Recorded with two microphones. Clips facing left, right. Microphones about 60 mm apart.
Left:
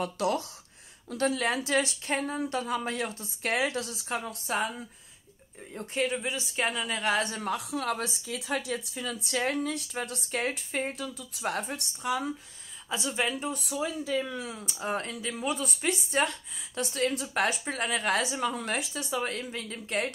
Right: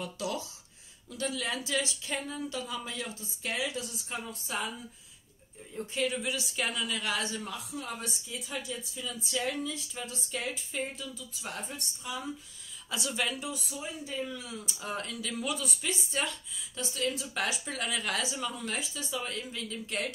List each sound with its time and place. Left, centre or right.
0.0 s speech: left
3.8 s speech: left
4.5 s speech: left
5.9 s a woman's voice: left
7.7 s speech: left
12.9 s speech: left
13.4 s speech: left
13.7 s speech: left
14.3 s speech: left
14.8 s a woman's voice: left